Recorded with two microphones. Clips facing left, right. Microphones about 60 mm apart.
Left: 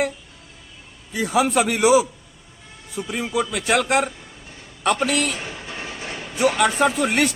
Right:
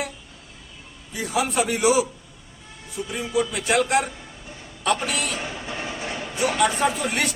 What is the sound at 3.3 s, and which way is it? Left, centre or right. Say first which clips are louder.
A man's voice: even; left.